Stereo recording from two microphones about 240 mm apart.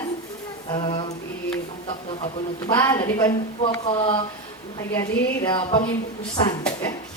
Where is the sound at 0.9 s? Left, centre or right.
Left.